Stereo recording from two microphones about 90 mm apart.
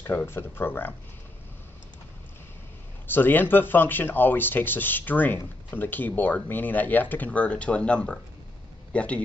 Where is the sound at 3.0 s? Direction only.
20° left (ahead or behind).